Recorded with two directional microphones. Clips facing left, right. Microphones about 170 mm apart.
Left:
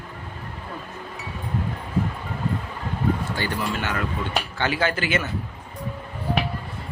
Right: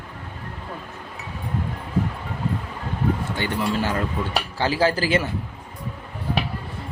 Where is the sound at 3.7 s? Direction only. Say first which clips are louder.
Right 3 dB; 30° right (ahead or behind).